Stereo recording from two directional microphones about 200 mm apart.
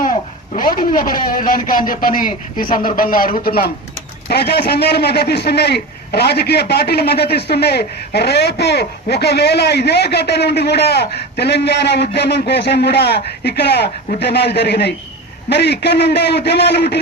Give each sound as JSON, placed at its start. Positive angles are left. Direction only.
{"t": 0.0, "sound": "a man's voice", "side_deg": 45}